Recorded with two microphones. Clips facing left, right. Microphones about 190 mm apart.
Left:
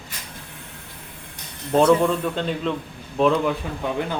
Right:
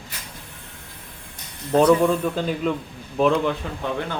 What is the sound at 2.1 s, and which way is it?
Speech, 5° right (ahead or behind).